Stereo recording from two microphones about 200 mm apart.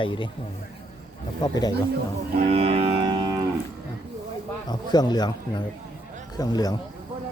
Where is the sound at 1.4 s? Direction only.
20° left (ahead or behind).